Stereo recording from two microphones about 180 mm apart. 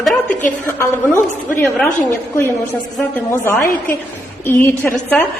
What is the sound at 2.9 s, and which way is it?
A woman's voice, 10° left (ahead or behind).